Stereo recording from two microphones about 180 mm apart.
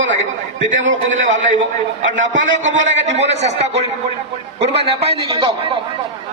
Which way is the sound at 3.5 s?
40° right (ahead or behind).